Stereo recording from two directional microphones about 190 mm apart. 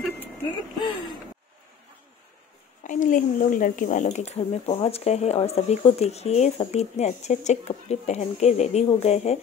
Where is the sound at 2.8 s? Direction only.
45° left (ahead or behind).